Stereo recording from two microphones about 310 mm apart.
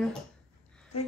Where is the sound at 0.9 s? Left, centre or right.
Left.